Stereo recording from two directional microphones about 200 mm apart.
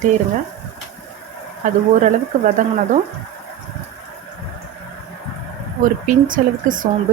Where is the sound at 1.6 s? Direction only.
40° right (ahead or behind).